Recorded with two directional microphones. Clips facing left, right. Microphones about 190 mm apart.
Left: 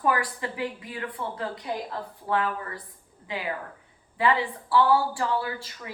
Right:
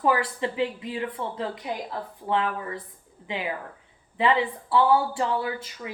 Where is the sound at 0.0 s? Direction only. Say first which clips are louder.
Right 3 dB; 25° right (ahead or behind).